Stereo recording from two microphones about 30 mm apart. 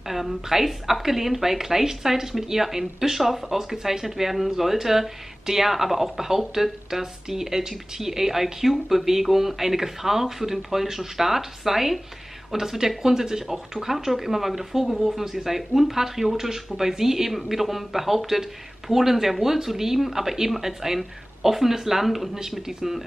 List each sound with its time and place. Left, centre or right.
0.0 s speech: centre
22.7 s speech: centre